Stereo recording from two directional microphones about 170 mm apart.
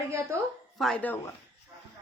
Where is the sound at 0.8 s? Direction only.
5° left (ahead or behind).